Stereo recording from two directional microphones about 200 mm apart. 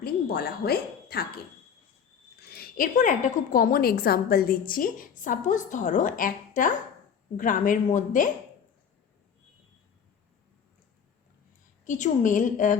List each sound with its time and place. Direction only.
0.0 s a woman's voice: 50° left (ahead or behind)
2.4 s a woman's voice: 50° left (ahead or behind)
11.9 s speech: 40° left (ahead or behind)